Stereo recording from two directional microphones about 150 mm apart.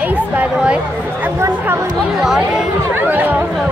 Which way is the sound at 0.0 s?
10° right (ahead or behind).